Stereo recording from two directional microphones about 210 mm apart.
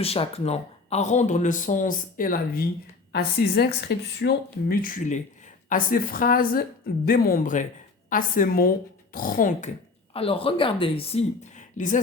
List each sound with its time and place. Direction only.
0.0 s speech: 30° left (ahead or behind)